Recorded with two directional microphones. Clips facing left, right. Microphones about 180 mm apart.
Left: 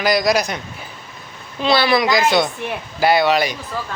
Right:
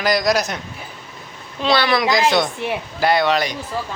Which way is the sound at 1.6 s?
5° left (ahead or behind).